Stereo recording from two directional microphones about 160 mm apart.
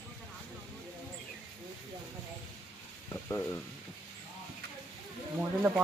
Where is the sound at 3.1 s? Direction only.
15° left (ahead or behind).